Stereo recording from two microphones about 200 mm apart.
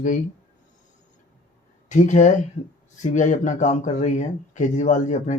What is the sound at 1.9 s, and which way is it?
Speech, 40° left (ahead or behind).